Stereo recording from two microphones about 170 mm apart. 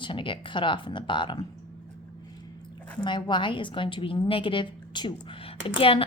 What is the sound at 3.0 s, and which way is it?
A woman's voice, 25° left (ahead or behind).